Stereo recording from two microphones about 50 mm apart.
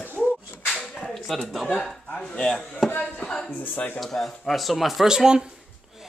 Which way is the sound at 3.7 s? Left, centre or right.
Left.